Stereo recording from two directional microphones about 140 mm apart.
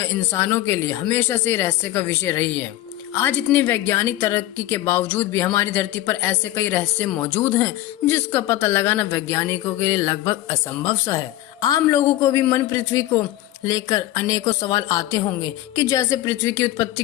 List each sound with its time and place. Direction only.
0.0 s speech: 20° left (ahead or behind)